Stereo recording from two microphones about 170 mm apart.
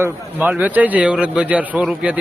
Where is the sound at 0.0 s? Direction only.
10° right (ahead or behind).